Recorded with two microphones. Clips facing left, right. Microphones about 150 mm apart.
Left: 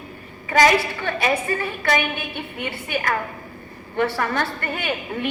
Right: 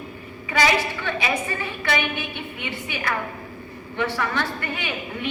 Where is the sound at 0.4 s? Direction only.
45° left (ahead or behind).